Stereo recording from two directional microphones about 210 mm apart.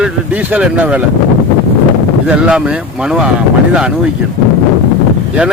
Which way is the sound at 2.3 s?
5° right (ahead or behind).